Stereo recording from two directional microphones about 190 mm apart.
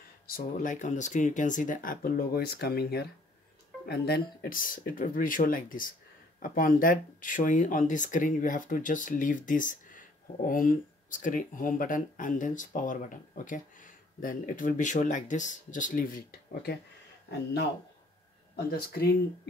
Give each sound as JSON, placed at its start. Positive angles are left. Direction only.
{"t": 0.3, "sound": "speech", "side_deg": 40}
{"t": 18.7, "sound": "speech", "side_deg": 55}